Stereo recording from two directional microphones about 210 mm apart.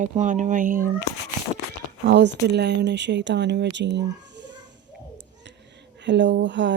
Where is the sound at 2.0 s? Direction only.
60° right (ahead or behind).